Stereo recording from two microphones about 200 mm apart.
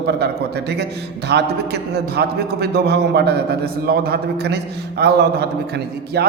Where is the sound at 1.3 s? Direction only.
55° right (ahead or behind).